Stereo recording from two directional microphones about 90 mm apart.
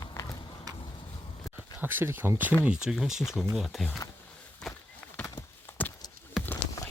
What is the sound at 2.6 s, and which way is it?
Speech, 10° right (ahead or behind).